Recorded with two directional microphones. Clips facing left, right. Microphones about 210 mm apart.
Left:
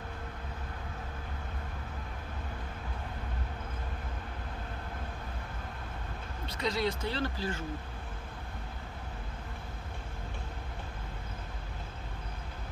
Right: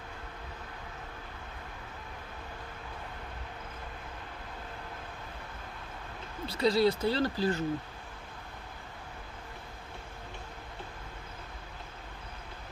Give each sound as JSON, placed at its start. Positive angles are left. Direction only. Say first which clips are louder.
{"t": 6.4, "sound": "speech", "louder": "right 6 dB", "side_deg": -30}